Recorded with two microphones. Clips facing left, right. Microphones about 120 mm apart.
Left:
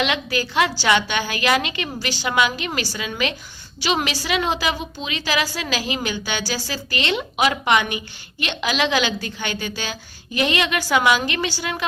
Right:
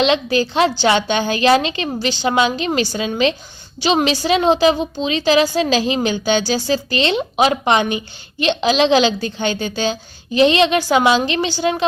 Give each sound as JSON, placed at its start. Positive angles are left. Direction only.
{"t": 0.0, "sound": "a woman's voice", "side_deg": -30}